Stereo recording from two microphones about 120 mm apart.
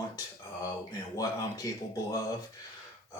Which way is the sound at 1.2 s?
30° left (ahead or behind).